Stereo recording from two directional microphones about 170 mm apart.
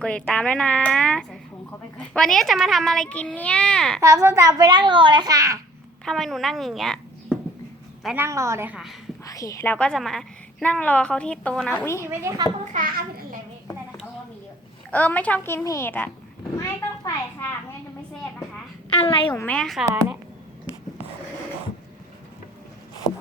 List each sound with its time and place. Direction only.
0.0 s a child's voice: 5° left (ahead or behind)
4.0 s a child's voice: 20° right (ahead or behind)
6.1 s a child's voice: centre (ahead or behind)
8.1 s a woman's voice: 15° right (ahead or behind)
9.2 s a woman's voice: 20° left (ahead or behind)
12.0 s a woman's voice: 15° right (ahead or behind)
14.8 s a woman's voice: 10° left (ahead or behind)
16.6 s a sound: 20° left (ahead or behind)
18.9 s a woman's voice: 35° left (ahead or behind)
19.3 s a woman's voice: 10° left (ahead or behind)